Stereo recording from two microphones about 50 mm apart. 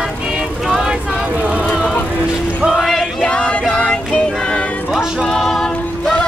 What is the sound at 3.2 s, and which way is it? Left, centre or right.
Music, left.